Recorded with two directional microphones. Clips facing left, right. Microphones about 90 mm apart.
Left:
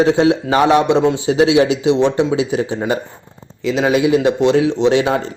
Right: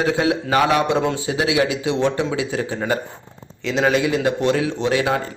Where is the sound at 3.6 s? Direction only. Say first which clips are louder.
Left 4 dB; 5° left (ahead or behind); by 5.1 s 25° left (ahead or behind).